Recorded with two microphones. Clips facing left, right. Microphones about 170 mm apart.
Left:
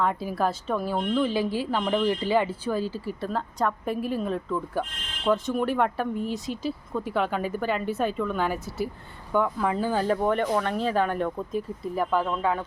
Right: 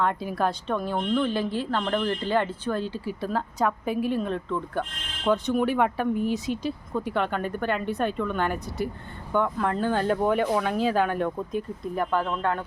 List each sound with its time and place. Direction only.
0.0 s a woman's voice: centre (ahead or behind)